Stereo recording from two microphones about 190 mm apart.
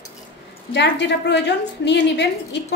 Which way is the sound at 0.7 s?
65° left (ahead or behind).